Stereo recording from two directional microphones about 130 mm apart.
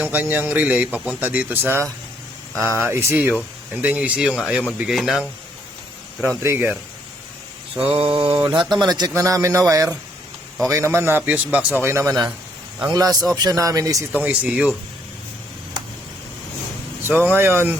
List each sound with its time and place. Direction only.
0.0 s speech: 15° right (ahead or behind)
2.9 s speech: 20° right (ahead or behind); by 5.2 s centre (ahead or behind)
6.2 s speech: 20° right (ahead or behind)
7.8 s mantra: 45° right (ahead or behind)
8.4 s speech: 35° right (ahead or behind)
14.2 s speech: 10° right (ahead or behind)
17.1 s speech: 15° right (ahead or behind)